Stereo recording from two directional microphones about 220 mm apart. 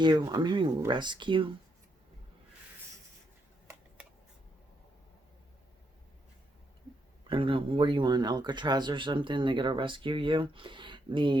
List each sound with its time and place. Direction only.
0.0 s speech: 20° right (ahead or behind)
7.3 s speech: 25° right (ahead or behind)